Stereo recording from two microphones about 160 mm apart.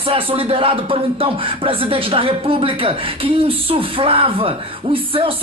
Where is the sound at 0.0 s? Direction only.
35° right (ahead or behind).